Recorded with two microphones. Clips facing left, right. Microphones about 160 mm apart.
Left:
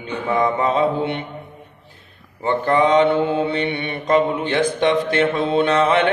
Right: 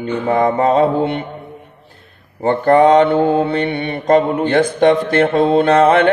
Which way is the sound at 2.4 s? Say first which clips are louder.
Right 6 dB; 50° right (ahead or behind).